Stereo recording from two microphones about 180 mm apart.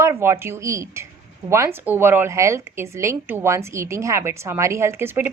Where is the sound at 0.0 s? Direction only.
15° right (ahead or behind).